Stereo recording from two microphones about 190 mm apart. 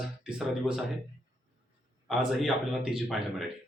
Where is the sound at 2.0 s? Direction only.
Centre (ahead or behind).